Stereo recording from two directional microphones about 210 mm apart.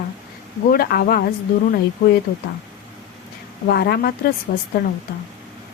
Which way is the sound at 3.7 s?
50° left (ahead or behind).